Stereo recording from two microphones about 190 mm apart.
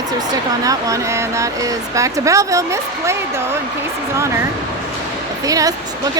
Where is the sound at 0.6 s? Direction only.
15° right (ahead or behind).